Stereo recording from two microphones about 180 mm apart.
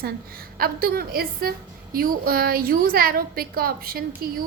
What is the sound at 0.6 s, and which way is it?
A woman's voice, 60° right (ahead or behind).